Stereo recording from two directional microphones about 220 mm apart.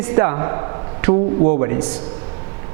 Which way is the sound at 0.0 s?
10° right (ahead or behind).